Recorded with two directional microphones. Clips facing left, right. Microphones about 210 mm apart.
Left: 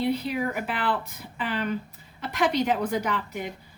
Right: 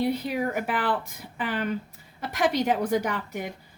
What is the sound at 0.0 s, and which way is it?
A woman's voice, 45° right (ahead or behind).